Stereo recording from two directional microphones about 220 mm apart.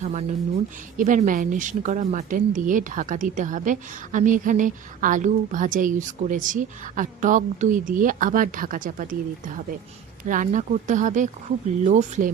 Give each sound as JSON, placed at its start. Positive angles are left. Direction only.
{"t": 0.0, "sound": "speech", "side_deg": -30}
{"t": 10.2, "sound": "speech", "side_deg": -35}